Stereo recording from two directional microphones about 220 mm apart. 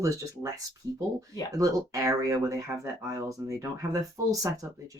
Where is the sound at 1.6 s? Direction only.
15° right (ahead or behind).